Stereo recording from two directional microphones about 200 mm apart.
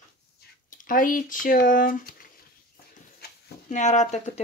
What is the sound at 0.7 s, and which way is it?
Speech, 45° left (ahead or behind).